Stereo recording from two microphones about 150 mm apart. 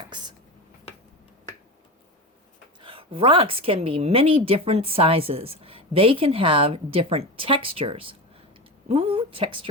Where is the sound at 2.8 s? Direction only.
35° right (ahead or behind).